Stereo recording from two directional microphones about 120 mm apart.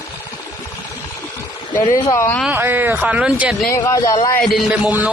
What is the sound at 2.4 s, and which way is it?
Speech, 15° right (ahead or behind).